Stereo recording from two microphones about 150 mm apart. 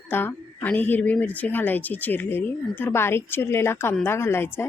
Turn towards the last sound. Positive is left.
turn(degrees=15)  # may be behind; listen again after turning